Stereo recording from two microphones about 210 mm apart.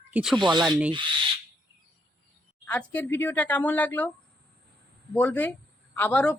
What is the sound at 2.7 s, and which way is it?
Speech, 10° left (ahead or behind).